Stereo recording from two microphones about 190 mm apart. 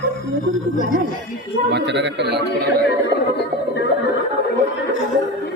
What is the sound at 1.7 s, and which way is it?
Speech, 60° right (ahead or behind).